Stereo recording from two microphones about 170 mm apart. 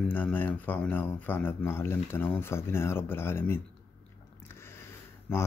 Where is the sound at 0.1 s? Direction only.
10° left (ahead or behind).